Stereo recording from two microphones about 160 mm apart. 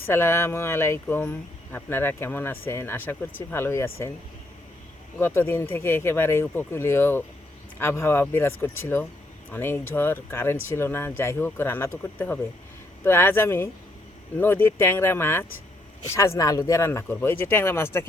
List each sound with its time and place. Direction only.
0.0 s speech: 15° left (ahead or behind)
5.2 s speech: 15° left (ahead or behind)